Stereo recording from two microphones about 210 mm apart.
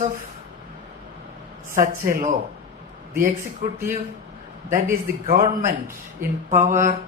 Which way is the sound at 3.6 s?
40° right (ahead or behind).